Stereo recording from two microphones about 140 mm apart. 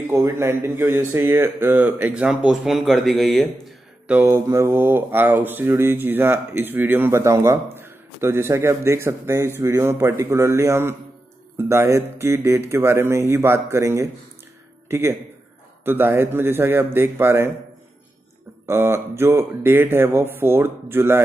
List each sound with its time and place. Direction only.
0.1 s speech: 20° right (ahead or behind); by 4.2 s centre (ahead or behind)
4.2 s speech: 20° right (ahead or behind)
18.7 s speech: 15° right (ahead or behind)